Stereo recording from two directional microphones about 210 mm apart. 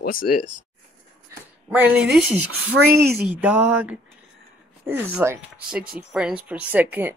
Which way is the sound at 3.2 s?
5° right (ahead or behind).